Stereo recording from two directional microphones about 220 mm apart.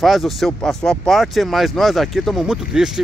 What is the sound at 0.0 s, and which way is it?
Speech, centre (ahead or behind).